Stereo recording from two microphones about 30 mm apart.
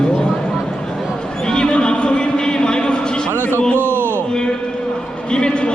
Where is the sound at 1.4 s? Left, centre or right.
Left.